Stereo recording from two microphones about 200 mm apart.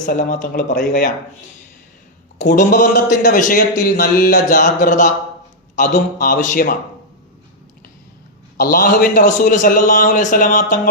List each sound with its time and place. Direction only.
0.0 s a man's voice: 40° left (ahead or behind)
2.4 s a man's voice: 40° left (ahead or behind)
8.5 s a man's voice: 45° left (ahead or behind)